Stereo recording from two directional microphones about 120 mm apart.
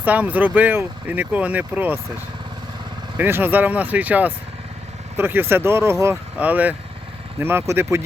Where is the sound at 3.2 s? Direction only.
15° right (ahead or behind).